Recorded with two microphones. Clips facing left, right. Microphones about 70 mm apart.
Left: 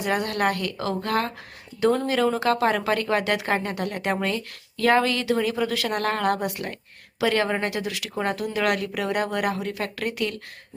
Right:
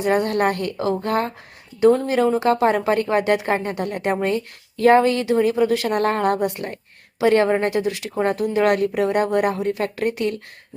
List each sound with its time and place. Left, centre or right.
0.0 s speech: right